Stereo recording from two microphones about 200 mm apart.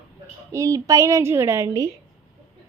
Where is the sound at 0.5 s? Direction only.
15° right (ahead or behind).